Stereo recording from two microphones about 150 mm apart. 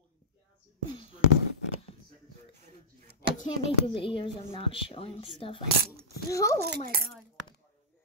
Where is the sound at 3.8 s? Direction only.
35° left (ahead or behind).